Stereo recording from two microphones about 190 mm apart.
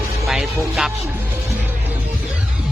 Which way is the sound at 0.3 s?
Centre (ahead or behind).